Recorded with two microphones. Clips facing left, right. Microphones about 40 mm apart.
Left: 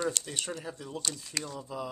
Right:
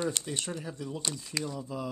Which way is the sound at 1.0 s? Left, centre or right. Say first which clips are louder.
Right 1 dB; centre.